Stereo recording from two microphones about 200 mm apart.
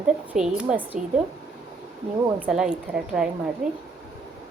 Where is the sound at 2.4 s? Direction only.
5° right (ahead or behind).